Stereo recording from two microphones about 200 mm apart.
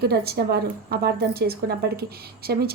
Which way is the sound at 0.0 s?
50° right (ahead or behind).